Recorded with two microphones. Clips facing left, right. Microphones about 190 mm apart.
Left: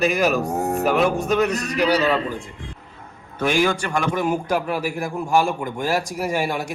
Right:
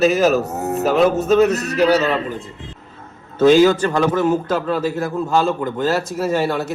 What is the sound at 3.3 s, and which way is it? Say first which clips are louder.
Speech: right 9 dB; 20° right (ahead or behind).